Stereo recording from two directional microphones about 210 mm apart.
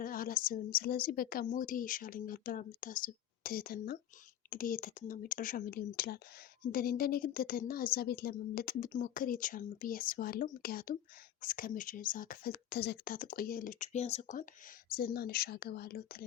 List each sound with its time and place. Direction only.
0.0 s a woman's voice: 45° left (ahead or behind)
14.8 s a woman's voice: 45° left (ahead or behind)